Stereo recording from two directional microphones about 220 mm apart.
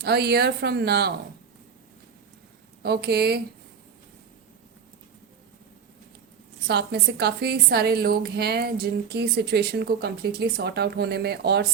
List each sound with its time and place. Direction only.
0.0 s a woman's voice: 50° right (ahead or behind)
2.8 s a woman's voice: 45° right (ahead or behind)
6.7 s a woman's voice: 50° right (ahead or behind)